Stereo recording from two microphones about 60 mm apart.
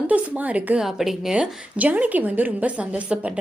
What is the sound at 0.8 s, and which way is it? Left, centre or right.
Speech, centre.